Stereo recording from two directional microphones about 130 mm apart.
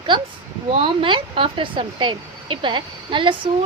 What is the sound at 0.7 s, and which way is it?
Speech, 45° right (ahead or behind).